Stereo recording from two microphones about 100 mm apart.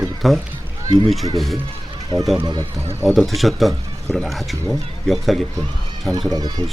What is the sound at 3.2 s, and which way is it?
Speech, centre (ahead or behind).